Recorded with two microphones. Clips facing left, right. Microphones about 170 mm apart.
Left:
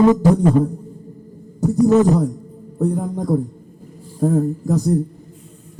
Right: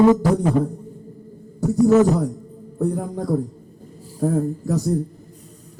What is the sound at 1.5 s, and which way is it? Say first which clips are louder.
Speech: left 1 dB; 15° left (ahead or behind).